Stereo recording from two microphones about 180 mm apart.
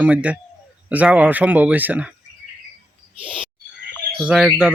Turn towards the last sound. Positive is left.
turn(degrees=-5)  # may be behind; listen again after turning